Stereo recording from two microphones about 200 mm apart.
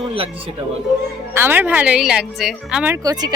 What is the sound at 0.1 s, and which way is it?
Speech, 25° right (ahead or behind).